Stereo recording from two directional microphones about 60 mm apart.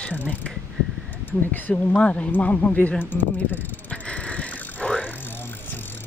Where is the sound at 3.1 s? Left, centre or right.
Left.